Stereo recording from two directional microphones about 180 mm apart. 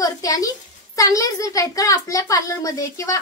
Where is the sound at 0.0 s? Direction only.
20° left (ahead or behind).